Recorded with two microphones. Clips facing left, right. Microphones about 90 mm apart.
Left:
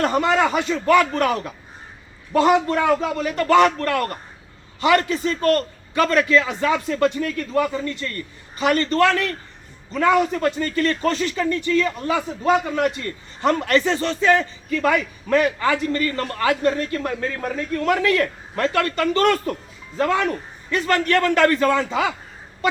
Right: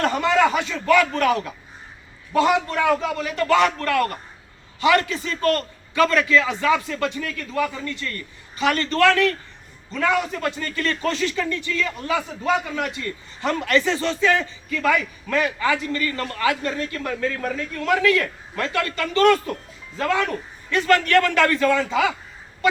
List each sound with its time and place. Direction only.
0.1 s a man's voice: 35° left (ahead or behind)
20.7 s a man's voice: 35° left (ahead or behind)